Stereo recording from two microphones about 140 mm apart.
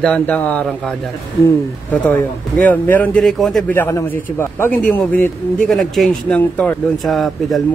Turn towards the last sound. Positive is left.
turn(degrees=0)  # may be behind; listen again after turning